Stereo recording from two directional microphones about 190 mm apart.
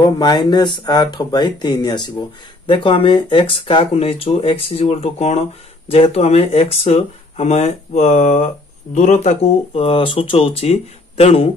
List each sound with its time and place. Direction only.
0.0 s speech: 20° left (ahead or behind)